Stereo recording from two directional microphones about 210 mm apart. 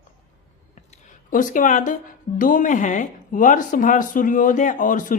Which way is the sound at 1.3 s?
40° left (ahead or behind).